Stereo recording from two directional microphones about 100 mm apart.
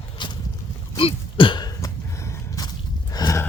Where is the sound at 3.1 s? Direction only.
40° left (ahead or behind).